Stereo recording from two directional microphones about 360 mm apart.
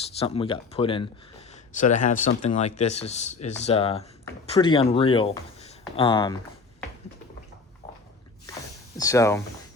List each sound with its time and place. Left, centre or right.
0.0 s speech: centre
9.0 s speech: centre